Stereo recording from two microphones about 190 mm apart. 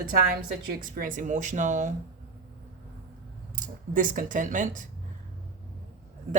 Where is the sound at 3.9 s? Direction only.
45° right (ahead or behind).